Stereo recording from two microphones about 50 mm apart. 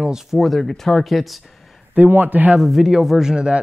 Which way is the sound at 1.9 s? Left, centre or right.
Right.